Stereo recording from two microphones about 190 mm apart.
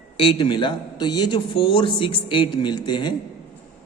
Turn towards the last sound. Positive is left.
turn(degrees=25)  # may be behind; listen again after turning